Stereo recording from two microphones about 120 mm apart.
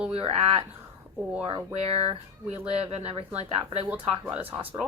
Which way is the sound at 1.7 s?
55° right (ahead or behind).